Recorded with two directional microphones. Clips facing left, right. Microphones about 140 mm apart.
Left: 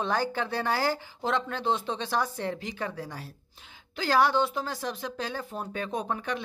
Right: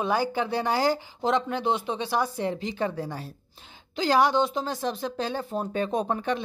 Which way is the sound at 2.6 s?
25° right (ahead or behind).